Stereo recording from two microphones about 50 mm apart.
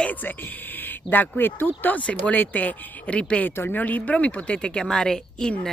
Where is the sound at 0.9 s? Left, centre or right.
Left.